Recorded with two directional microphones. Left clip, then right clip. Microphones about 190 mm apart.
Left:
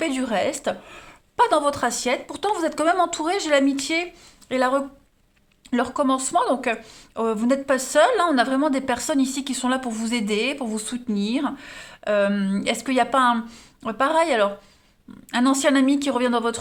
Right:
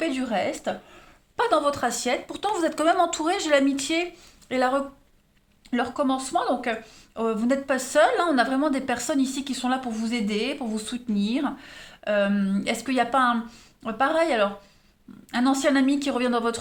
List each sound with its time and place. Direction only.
0.0 s speech: 40° left (ahead or behind)
5.7 s speech: 35° left (ahead or behind)